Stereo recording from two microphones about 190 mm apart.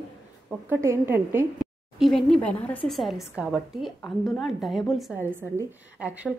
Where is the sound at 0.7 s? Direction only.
15° right (ahead or behind).